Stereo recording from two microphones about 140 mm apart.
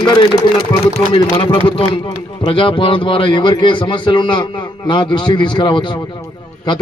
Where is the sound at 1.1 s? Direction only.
40° left (ahead or behind).